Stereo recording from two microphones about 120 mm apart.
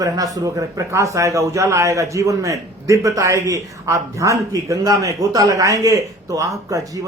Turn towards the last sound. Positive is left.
turn(degrees=-30)  # may be behind; listen again after turning